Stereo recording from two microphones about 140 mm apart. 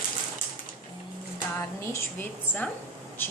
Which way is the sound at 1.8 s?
20° left (ahead or behind).